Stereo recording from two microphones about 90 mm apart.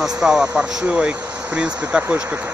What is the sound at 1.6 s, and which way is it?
Speech, 10° right (ahead or behind).